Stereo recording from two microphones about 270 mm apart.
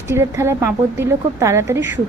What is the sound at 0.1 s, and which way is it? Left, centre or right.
A woman's voice, centre.